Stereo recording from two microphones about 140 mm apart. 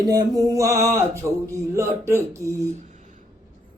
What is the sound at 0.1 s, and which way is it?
Male singing, 25° right (ahead or behind).